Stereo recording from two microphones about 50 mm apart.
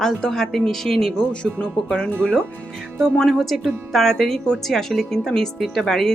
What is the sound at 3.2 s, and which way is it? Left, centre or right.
A woman's voice, centre.